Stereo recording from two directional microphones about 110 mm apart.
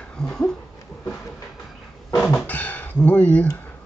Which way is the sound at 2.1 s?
10° left (ahead or behind).